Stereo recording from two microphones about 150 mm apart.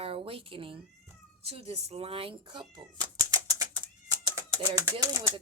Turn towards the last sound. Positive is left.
turn(degrees=-20)  # may be behind; listen again after turning